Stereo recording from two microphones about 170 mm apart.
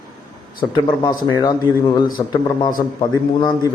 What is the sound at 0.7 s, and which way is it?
Speech, 25° left (ahead or behind).